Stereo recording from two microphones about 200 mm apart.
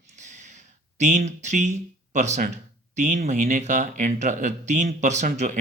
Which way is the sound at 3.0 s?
35° right (ahead or behind).